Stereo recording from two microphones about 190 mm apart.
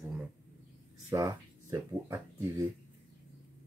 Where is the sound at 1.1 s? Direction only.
15° right (ahead or behind).